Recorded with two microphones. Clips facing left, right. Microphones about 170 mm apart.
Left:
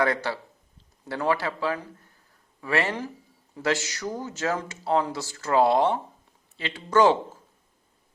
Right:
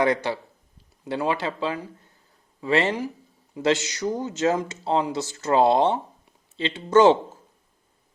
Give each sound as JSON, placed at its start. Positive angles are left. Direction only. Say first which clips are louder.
{"t": 0.0, "sound": "speech", "louder": "right 3 dB", "side_deg": -20}